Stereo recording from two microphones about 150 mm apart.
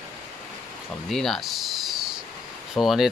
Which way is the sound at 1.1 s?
Centre (ahead or behind).